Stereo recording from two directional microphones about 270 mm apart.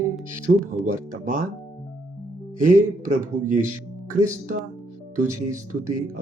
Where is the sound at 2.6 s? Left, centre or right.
Right.